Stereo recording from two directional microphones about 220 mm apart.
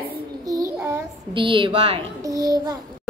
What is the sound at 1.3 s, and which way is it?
A child's voice, 20° right (ahead or behind).